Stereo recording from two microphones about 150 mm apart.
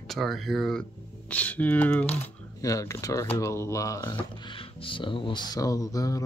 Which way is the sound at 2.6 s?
20° left (ahead or behind).